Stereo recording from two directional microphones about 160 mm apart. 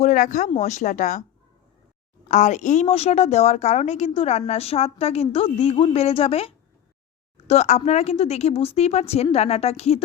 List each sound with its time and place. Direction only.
0.0 s speech: 50° left (ahead or behind)
2.2 s a woman's voice: 50° left (ahead or behind)